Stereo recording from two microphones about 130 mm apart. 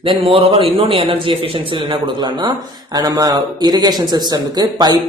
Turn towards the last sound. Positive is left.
turn(degrees=-30)  # may be behind; listen again after turning